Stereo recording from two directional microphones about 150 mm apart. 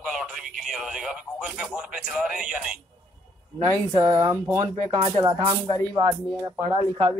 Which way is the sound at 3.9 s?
25° right (ahead or behind).